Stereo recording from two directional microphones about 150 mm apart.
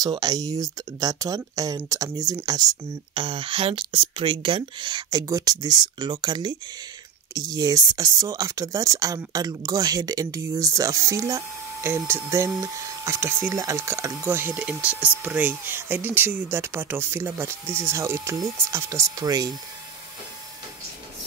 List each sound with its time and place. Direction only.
0.0 s speech: 25° right (ahead or behind)